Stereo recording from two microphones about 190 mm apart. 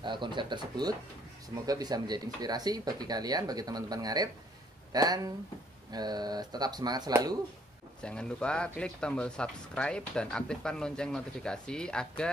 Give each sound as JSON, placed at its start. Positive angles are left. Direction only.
{"t": 0.0, "sound": "speech", "side_deg": -25}
{"t": 8.0, "sound": "speech", "side_deg": 5}